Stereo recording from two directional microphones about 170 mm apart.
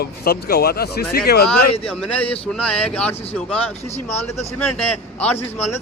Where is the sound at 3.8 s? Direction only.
40° left (ahead or behind).